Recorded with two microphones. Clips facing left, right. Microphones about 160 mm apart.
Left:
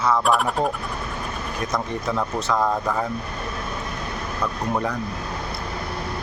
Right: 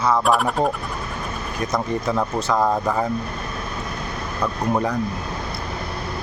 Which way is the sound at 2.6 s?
15° right (ahead or behind).